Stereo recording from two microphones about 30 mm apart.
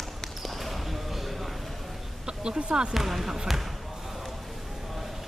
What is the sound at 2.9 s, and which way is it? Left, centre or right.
Speech, centre.